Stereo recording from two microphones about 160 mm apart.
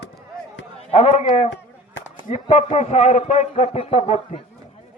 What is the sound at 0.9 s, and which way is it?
A man's voice, 40° left (ahead or behind).